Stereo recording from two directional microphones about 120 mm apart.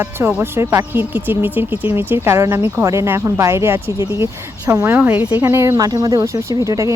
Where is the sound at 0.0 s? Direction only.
15° right (ahead or behind).